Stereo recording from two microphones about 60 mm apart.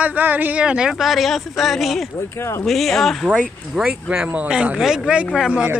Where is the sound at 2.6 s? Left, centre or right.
Centre.